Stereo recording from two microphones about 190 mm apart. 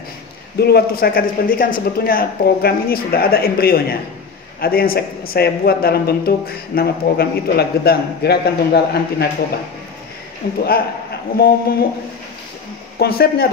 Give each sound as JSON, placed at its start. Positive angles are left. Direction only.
{"t": 0.6, "sound": "a man's voice", "side_deg": 55}
{"t": 10.4, "sound": "a man's voice", "side_deg": 50}
{"t": 13.0, "sound": "a man's voice", "side_deg": 55}